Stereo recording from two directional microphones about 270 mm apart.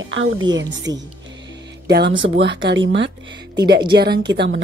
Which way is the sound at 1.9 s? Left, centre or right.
Right.